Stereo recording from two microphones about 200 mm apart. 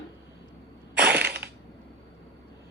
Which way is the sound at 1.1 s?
55° right (ahead or behind).